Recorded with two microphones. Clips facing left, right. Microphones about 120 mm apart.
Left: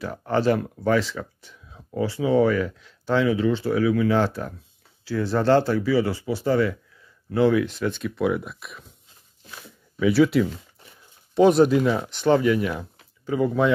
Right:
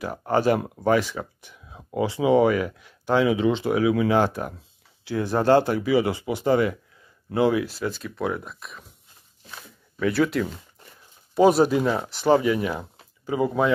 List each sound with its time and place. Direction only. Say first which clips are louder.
0.3 s speech: even; 10° right (ahead or behind)
9.9 s speech: left 4 dB; 5° left (ahead or behind)